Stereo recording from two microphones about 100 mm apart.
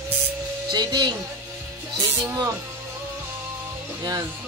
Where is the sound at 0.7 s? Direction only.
45° right (ahead or behind).